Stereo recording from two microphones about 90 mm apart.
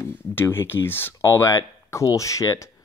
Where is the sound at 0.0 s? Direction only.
25° left (ahead or behind).